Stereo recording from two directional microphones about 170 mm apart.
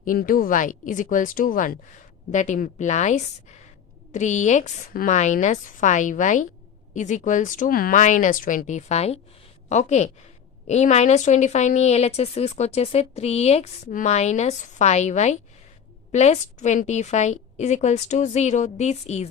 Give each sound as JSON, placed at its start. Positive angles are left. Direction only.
{"t": 0.0, "sound": "a woman's voice", "side_deg": 55}